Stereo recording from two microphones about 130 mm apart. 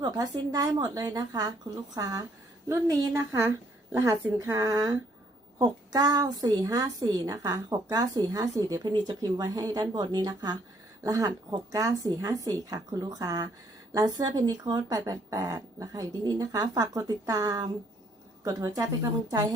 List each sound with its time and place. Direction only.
0.0 s a woman's voice: 30° right (ahead or behind)